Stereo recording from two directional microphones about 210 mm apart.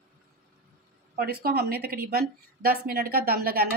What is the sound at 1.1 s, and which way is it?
A woman's voice, 45° right (ahead or behind).